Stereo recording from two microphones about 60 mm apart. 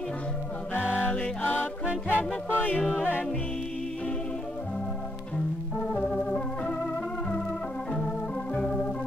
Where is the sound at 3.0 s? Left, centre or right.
Left.